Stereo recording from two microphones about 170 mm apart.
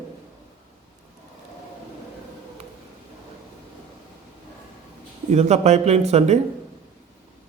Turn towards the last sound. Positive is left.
turn(degrees=-40)  # may be behind; listen again after turning